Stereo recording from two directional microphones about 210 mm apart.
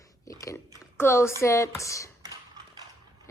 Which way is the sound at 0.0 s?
15° left (ahead or behind).